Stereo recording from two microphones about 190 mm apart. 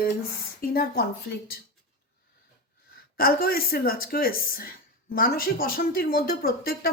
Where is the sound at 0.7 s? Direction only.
50° left (ahead or behind).